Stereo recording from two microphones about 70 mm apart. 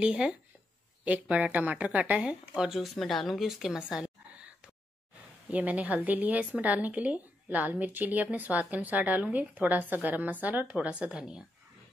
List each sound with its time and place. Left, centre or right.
0.0 s speech: centre
5.5 s a woman's voice: right